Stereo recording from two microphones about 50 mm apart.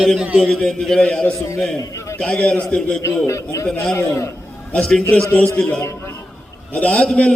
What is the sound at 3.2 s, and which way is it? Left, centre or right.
A man's voice, left.